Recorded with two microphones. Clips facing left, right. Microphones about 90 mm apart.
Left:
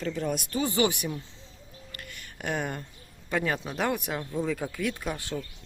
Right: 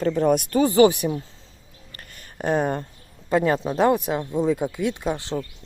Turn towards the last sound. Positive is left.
turn(degrees=-25)  # may be behind; listen again after turning